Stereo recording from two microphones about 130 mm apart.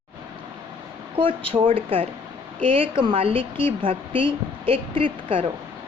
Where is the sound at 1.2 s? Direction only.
40° right (ahead or behind).